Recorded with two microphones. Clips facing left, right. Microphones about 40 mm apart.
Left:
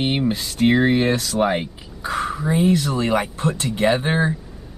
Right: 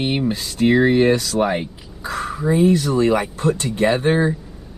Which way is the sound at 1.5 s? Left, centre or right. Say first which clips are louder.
Even; left.